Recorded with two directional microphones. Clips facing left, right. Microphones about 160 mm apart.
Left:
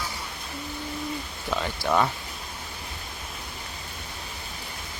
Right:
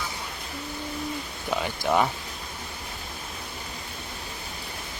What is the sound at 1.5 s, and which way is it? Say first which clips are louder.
Speech: right 1 dB; 15° right (ahead or behind).